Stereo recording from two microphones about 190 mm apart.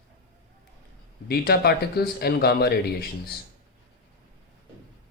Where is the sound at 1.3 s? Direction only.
55° left (ahead or behind).